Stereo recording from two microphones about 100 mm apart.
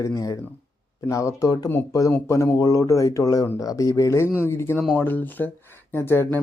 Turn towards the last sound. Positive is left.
turn(degrees=25)  # may be behind; listen again after turning